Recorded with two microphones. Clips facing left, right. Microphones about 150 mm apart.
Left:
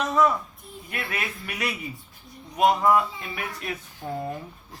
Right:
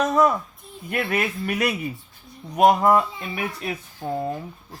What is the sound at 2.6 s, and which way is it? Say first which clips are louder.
Speech: right 4 dB; 45° right (ahead or behind).